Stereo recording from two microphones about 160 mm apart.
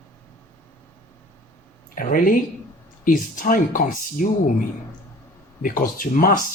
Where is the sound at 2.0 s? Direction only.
60° left (ahead or behind).